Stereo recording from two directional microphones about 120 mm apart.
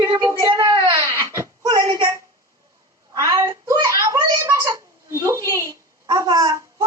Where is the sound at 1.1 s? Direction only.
25° right (ahead or behind).